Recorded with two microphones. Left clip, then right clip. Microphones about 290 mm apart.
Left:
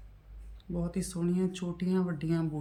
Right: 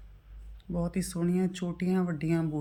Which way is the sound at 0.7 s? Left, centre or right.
Centre.